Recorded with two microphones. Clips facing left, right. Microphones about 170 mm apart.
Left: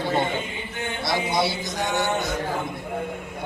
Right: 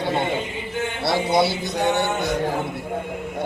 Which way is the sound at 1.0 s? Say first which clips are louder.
Right 5 dB; 60° right (ahead or behind).